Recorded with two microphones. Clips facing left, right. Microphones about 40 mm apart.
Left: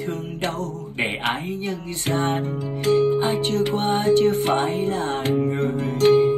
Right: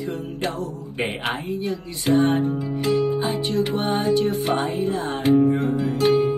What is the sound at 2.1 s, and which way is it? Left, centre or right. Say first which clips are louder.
Music: right 5 dB; left.